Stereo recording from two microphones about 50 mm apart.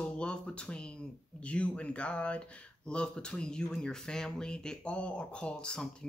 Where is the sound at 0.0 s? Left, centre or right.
Left.